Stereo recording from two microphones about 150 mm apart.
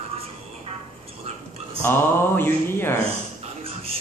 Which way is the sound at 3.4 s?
40° right (ahead or behind).